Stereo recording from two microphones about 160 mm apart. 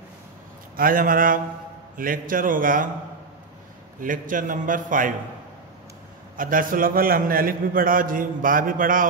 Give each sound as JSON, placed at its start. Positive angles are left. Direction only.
{"t": 0.7, "sound": "a man's voice", "side_deg": -60}
{"t": 4.0, "sound": "a man's voice", "side_deg": -55}
{"t": 6.3, "sound": "a man's voice", "side_deg": -60}